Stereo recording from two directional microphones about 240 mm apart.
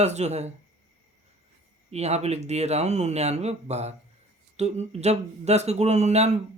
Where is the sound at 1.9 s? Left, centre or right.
Right.